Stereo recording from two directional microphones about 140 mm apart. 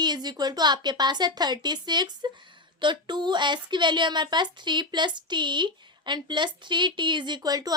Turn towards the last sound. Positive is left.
turn(degrees=-25)  # may be behind; listen again after turning